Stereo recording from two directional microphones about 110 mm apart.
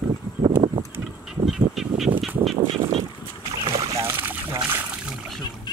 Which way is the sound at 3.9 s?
20° right (ahead or behind).